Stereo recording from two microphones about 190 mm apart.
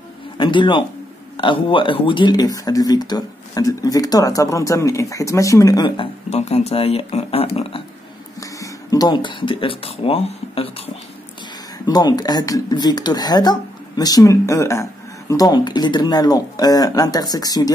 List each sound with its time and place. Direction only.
0.4 s speech: 25° left (ahead or behind)
8.4 s speech: 20° left (ahead or behind)
11.8 s speech: 20° left (ahead or behind)